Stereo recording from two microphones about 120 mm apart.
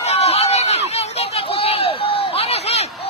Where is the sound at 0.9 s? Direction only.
65° left (ahead or behind).